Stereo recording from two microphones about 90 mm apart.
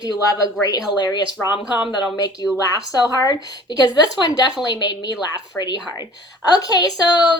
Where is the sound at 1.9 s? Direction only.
50° left (ahead or behind).